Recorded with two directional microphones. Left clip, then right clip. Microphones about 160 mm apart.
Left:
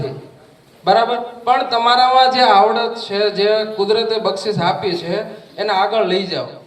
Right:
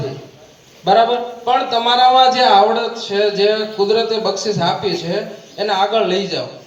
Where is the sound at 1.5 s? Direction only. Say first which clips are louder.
Left 1 dB; 65° right (ahead or behind).